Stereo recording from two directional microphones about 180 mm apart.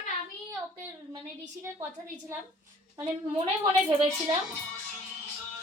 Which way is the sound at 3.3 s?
25° right (ahead or behind).